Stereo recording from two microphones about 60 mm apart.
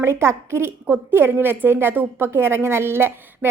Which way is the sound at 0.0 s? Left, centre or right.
Right.